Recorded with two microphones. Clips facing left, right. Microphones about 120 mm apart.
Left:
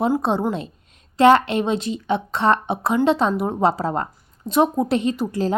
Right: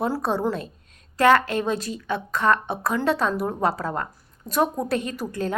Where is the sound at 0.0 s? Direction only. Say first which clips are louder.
Left 4 dB; 20° left (ahead or behind).